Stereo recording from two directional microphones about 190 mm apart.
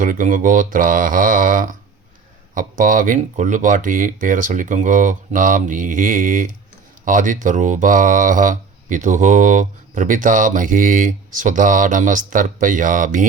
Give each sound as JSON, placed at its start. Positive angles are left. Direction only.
{"t": 0.0, "sound": "speech", "side_deg": -45}